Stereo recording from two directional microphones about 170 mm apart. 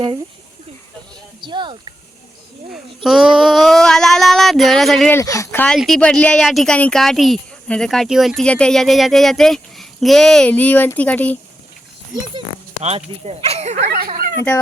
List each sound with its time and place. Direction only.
1.4 s speech: 25° right (ahead or behind)
2.7 s speech: centre (ahead or behind)
5.1 s speech: 20° left (ahead or behind)
13.2 s speech: 40° right (ahead or behind)
13.8 s speech: 70° right (ahead or behind)
14.3 s speech: 15° left (ahead or behind)